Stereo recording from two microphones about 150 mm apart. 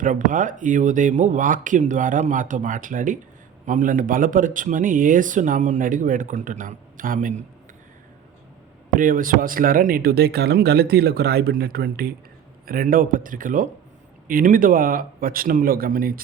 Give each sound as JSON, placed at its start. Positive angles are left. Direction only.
{"t": 0.0, "sound": "speech", "side_deg": -60}
{"t": 9.0, "sound": "speech", "side_deg": -65}
{"t": 12.6, "sound": "speech", "side_deg": -75}